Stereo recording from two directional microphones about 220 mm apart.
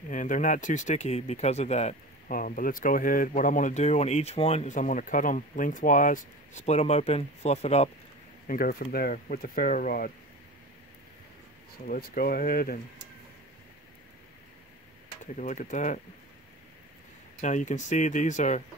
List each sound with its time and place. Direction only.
0.1 s speech: 35° left (ahead or behind)
8.5 s speech: 40° left (ahead or behind)
11.9 s speech: 40° left (ahead or behind)
15.3 s speech: 35° left (ahead or behind)
17.4 s speech: 35° left (ahead or behind)